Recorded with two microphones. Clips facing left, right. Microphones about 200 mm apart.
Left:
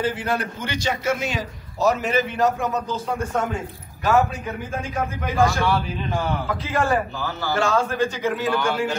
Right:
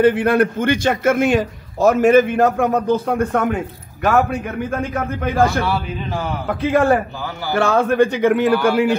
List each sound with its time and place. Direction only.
0.0 s a man's voice: 60° right (ahead or behind)
6.6 s a man's voice: 60° right (ahead or behind)
8.5 s a man's voice: 10° right (ahead or behind)